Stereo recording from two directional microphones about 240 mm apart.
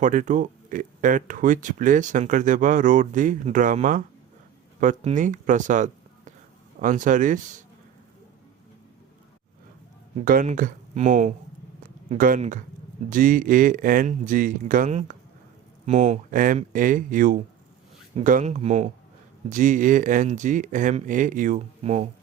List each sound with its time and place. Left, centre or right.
0.0 s speech: right
10.2 s speech: right